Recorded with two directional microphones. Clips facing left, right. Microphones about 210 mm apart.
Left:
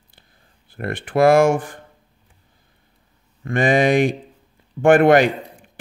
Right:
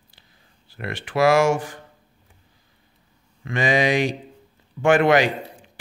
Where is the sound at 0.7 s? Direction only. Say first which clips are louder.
Left 5 dB; 55° left (ahead or behind).